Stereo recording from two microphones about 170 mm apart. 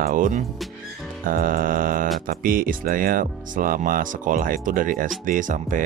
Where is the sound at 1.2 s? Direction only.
55° right (ahead or behind).